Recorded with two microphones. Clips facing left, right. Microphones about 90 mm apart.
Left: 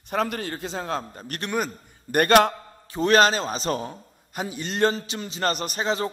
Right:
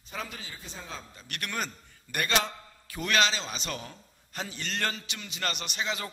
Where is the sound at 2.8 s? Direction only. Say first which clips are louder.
Left 9 dB; 30° left (ahead or behind).